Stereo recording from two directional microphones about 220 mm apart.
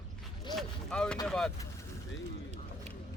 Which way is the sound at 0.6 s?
5° left (ahead or behind).